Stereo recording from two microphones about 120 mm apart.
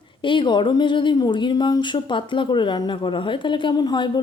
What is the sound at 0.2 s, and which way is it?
Speech, 40° left (ahead or behind).